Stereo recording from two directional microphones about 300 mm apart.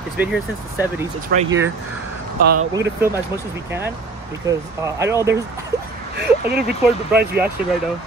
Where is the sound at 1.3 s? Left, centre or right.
Right.